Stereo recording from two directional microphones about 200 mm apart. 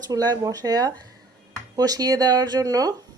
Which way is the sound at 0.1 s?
20° right (ahead or behind).